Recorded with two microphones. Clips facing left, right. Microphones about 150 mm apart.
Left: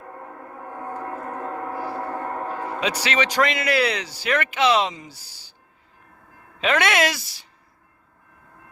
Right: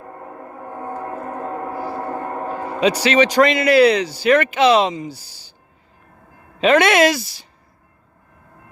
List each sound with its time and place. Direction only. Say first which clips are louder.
2.0 s gong: right 3 dB; 10° right (ahead or behind)
2.8 s speech: right 10 dB; 35° right (ahead or behind)
6.6 s speech: right 7 dB; 30° right (ahead or behind)